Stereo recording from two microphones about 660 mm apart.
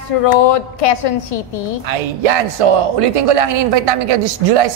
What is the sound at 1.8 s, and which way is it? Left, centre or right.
A woman's voice, right.